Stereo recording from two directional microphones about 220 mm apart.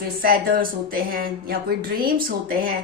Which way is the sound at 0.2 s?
40° right (ahead or behind).